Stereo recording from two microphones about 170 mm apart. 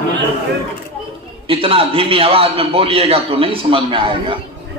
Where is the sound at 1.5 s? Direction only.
30° right (ahead or behind).